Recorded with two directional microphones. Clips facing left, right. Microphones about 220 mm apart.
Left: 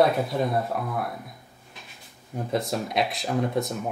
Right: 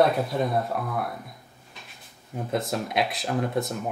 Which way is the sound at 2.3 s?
Centre (ahead or behind).